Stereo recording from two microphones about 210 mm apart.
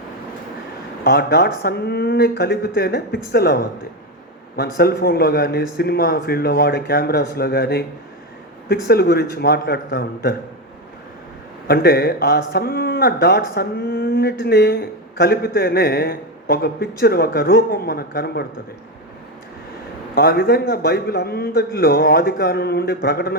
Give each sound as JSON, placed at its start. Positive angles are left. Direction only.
{"t": 1.0, "sound": "speech", "side_deg": 50}
{"t": 4.8, "sound": "speech", "side_deg": 50}
{"t": 11.7, "sound": "speech", "side_deg": 50}
{"t": 20.1, "sound": "speech", "side_deg": 45}